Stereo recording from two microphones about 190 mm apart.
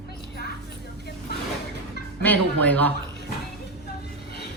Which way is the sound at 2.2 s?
10° left (ahead or behind).